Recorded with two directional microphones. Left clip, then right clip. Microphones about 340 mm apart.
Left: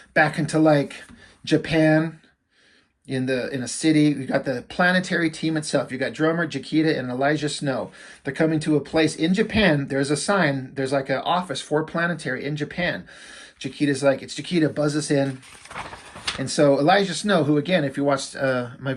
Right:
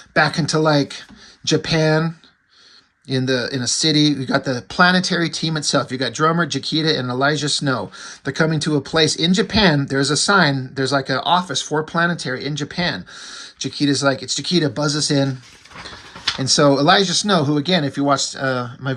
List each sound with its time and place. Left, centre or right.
0.1 s speech: centre
3.1 s speech: centre
9.5 s speech: right
9.8 s speech: centre
16.4 s speech: centre